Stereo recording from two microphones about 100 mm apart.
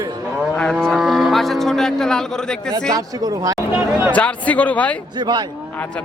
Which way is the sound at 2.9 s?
35° right (ahead or behind).